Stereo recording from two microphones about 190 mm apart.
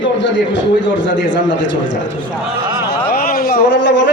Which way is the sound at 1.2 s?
75° left (ahead or behind).